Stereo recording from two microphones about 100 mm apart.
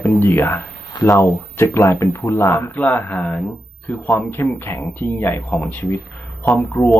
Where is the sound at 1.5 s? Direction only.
25° left (ahead or behind).